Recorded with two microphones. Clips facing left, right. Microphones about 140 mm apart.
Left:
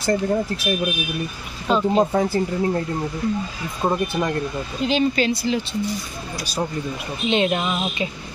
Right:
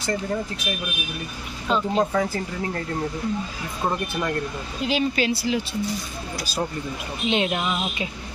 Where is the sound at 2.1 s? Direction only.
30° left (ahead or behind).